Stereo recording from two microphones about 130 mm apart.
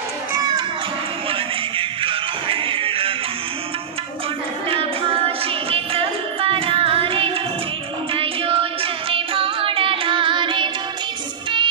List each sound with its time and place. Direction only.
0.3 s children playing: 30° right (ahead or behind)
1.8 s music: 40° right (ahead or behind)
4.6 s music: 45° right (ahead or behind)